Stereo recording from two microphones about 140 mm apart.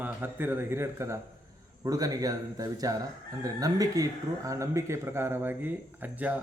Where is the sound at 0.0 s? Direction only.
15° right (ahead or behind).